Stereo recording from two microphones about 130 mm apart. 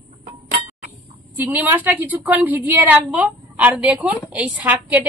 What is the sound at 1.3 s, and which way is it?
A woman's voice, 15° right (ahead or behind).